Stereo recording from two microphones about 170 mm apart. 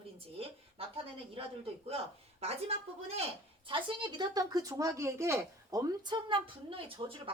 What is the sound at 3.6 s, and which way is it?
Speech, 30° right (ahead or behind).